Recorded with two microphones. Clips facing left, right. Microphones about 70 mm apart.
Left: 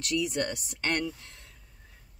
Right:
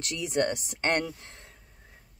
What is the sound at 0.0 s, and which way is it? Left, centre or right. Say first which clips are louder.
A woman's voice: right 1 dB; right.